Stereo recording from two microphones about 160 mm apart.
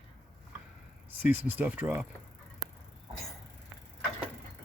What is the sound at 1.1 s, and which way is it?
Speech, 10° right (ahead or behind).